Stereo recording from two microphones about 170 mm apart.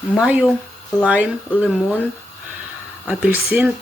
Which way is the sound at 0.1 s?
5° right (ahead or behind).